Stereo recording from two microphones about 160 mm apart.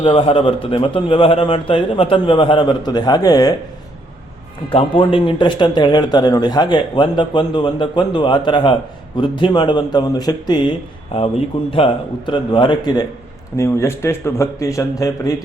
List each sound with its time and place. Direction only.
0.0 s a man's voice: 35° left (ahead or behind)
4.7 s a man's voice: 35° left (ahead or behind)